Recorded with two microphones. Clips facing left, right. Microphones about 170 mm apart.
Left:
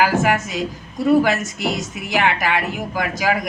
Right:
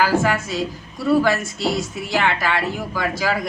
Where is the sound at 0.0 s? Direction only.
20° left (ahead or behind).